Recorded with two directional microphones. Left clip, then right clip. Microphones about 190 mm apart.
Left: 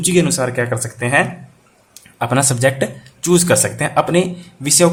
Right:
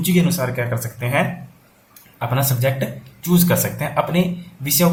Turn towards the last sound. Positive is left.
turn(degrees=45)  # may be behind; listen again after turning